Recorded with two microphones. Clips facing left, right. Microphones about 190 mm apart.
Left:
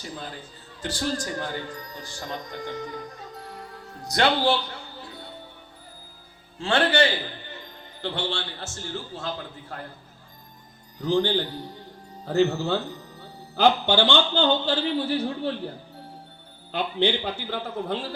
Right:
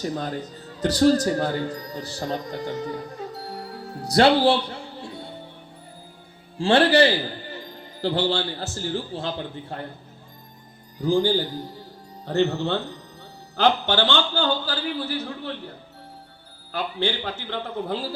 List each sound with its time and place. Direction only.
0.0 s speech: 40° right (ahead or behind)
6.6 s a man's voice: 35° right (ahead or behind)
11.0 s a man's voice: 10° right (ahead or behind)
12.2 s a man's voice: centre (ahead or behind); by 15.5 s 30° left (ahead or behind)
16.7 s speech: 20° left (ahead or behind)
17.5 s a man's voice: centre (ahead or behind)